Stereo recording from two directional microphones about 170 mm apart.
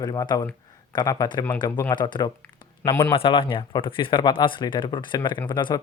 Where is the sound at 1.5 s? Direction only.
10° left (ahead or behind).